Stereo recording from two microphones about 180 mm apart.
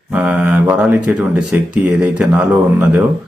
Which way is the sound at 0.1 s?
5° right (ahead or behind).